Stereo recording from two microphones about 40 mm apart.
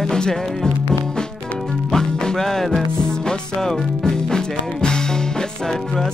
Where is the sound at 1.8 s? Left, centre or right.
Centre.